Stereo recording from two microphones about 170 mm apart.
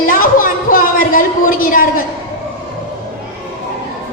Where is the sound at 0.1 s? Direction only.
55° left (ahead or behind).